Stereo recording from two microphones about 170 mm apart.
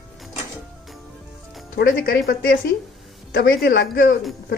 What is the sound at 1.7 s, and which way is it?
A woman's voice, 65° left (ahead or behind).